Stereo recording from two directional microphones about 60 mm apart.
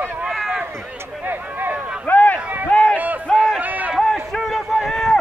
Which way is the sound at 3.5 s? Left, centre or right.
Right.